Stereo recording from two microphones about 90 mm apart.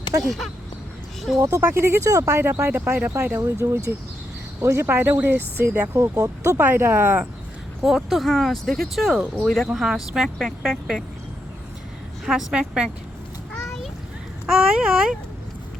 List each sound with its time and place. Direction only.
0.2 s speech: centre (ahead or behind)
1.4 s speech: 30° right (ahead or behind)
5.9 s speech: 35° right (ahead or behind)
6.6 s speech: 20° right (ahead or behind)
7.8 s speech: 5° right (ahead or behind)
12.2 s a woman's voice: 5° right (ahead or behind)
14.7 s a woman's voice: 10° right (ahead or behind)